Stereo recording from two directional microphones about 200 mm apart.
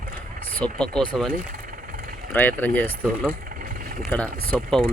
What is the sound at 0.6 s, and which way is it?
Speech, 5° left (ahead or behind).